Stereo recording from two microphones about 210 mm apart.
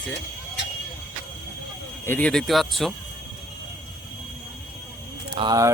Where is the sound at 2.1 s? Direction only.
5° left (ahead or behind).